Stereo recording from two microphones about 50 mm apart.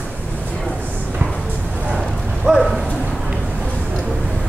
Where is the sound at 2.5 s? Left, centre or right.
Centre.